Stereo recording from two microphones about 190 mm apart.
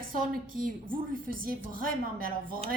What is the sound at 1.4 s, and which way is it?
A woman's voice, 50° right (ahead or behind).